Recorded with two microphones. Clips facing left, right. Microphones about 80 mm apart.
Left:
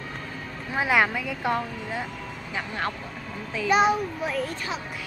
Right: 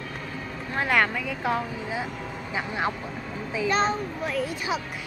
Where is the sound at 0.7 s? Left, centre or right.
Centre.